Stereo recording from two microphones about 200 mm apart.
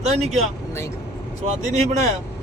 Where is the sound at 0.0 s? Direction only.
35° right (ahead or behind).